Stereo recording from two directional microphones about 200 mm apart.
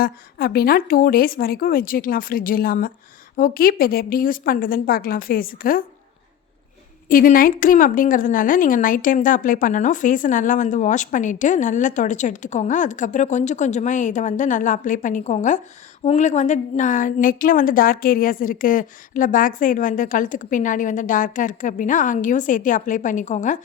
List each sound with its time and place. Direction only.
0.0 s a woman's voice: 50° left (ahead or behind)
7.1 s a woman's voice: 45° left (ahead or behind)